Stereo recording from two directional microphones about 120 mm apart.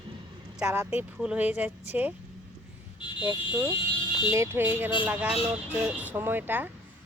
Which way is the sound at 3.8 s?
45° left (ahead or behind).